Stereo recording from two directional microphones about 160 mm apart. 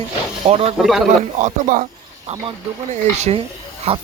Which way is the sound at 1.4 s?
50° right (ahead or behind).